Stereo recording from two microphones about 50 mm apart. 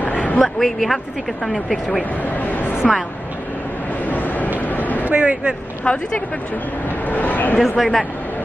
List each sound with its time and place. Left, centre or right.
0.0 s a sound: left
0.4 s speech: centre
2.2 s a sound: left
4.0 s vehicle: left
5.1 s speech: right
5.9 s speech: centre
7.1 s speech: left
7.6 s speech: centre